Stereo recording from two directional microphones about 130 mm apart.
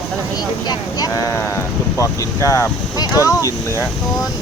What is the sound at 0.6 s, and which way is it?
Speech, 30° left (ahead or behind).